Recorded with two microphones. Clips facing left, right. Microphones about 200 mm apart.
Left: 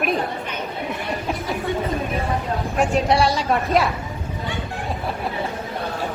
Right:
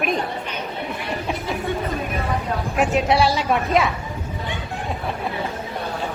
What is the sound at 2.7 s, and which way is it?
A woman's voice, centre (ahead or behind).